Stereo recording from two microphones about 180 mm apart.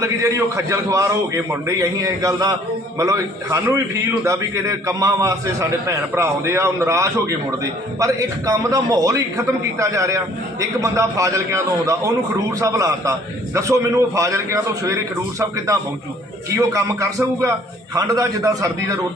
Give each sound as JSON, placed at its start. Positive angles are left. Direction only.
{"t": 0.0, "sound": "a man's voice", "side_deg": -15}